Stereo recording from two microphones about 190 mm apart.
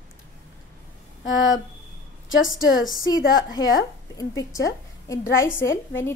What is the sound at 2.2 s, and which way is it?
Speech, 90° left.